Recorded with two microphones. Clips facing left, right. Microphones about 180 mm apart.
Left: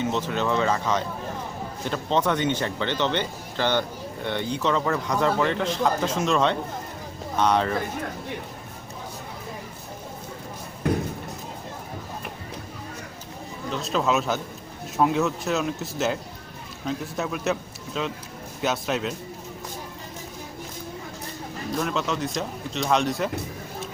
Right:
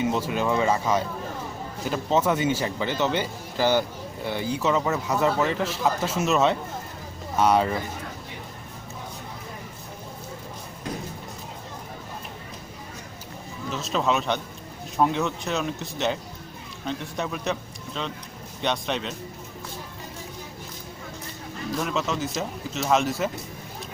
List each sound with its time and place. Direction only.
0.0 s speech: 10° right (ahead or behind)
10.8 s a sound: 60° left (ahead or behind)
13.7 s speech: centre (ahead or behind)
21.8 s speech: centre (ahead or behind)